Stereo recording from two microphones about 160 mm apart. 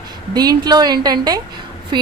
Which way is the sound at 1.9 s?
30° right (ahead or behind).